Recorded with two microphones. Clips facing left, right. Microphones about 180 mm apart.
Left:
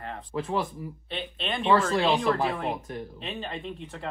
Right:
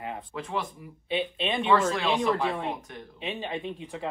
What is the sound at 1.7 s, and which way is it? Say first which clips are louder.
Speech: left 3 dB; 30° left (ahead or behind).